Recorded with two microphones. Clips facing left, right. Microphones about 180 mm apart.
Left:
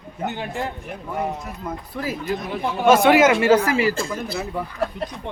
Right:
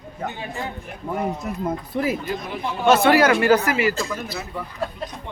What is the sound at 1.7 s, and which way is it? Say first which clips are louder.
Speech: right 4 dB; 20° right (ahead or behind).